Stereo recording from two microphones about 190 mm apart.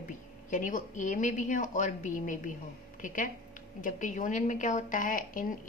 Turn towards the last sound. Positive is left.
turn(degrees=45)  # may be behind; listen again after turning